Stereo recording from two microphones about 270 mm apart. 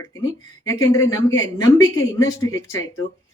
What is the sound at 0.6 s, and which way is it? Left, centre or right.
A woman's voice, centre.